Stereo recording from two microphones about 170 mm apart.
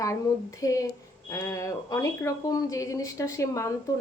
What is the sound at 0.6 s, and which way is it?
Speech, 20° left (ahead or behind).